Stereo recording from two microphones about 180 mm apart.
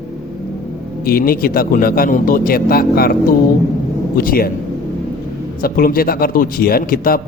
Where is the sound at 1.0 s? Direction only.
55° left (ahead or behind).